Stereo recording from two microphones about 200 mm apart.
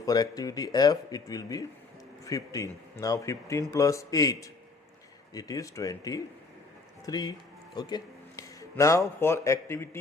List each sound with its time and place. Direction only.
0.0 s a man's voice: 20° left (ahead or behind)